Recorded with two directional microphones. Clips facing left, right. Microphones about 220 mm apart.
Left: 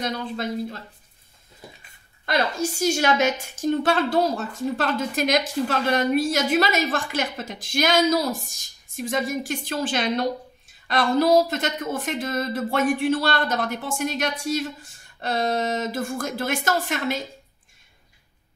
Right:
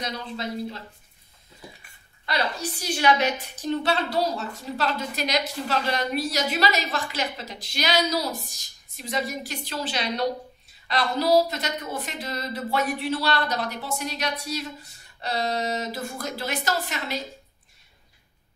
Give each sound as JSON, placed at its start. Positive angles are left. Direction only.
{"t": 0.0, "sound": "a woman's voice", "side_deg": 50}
{"t": 2.2, "sound": "a woman's voice", "side_deg": 45}